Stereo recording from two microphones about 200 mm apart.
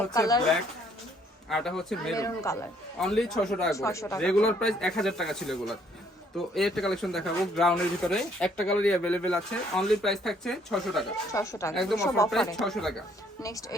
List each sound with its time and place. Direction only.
0.1 s speech: 15° left (ahead or behind)
1.5 s speech: centre (ahead or behind)
2.1 s speech: 15° left (ahead or behind)
3.0 s speech: centre (ahead or behind)
3.8 s speech: 15° left (ahead or behind)
4.2 s speech: 5° left (ahead or behind)
11.3 s speech: 15° left (ahead or behind)
11.7 s speech: centre (ahead or behind)
11.9 s speech: 15° left (ahead or behind)
12.5 s speech: centre (ahead or behind)
13.4 s speech: 15° left (ahead or behind)